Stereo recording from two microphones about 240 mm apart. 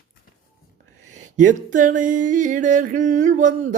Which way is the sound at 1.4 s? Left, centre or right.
Right.